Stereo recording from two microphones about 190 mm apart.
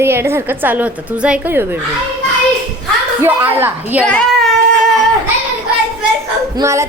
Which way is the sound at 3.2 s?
10° right (ahead or behind).